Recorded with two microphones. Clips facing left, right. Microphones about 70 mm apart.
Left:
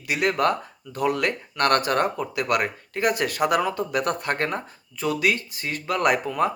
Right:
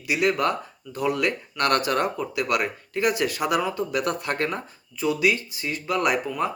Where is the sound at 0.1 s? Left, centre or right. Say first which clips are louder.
Even; left.